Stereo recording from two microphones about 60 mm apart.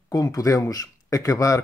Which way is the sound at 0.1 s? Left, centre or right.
Left.